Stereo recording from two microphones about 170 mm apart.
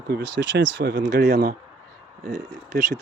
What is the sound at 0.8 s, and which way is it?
Speech, 70° right (ahead or behind).